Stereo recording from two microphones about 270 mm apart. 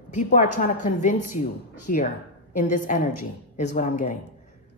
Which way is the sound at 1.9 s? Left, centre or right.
Left.